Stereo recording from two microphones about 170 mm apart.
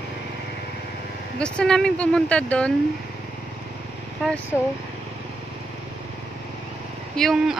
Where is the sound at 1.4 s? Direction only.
5° left (ahead or behind).